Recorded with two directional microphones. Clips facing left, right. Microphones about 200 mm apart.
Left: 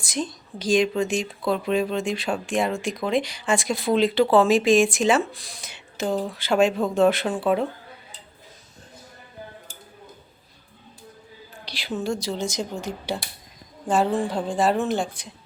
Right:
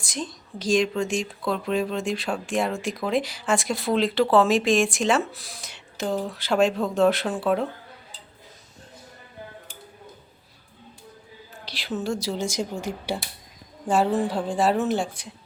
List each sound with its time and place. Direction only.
0.0 s a woman's voice: centre (ahead or behind)
11.6 s speech: centre (ahead or behind)